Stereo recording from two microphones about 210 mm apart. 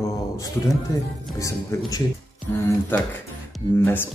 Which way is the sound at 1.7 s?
15° left (ahead or behind).